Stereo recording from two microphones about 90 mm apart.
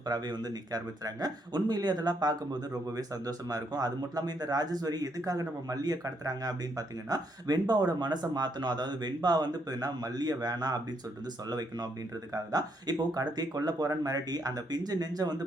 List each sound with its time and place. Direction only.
0.0 s speech: 50° right (ahead or behind)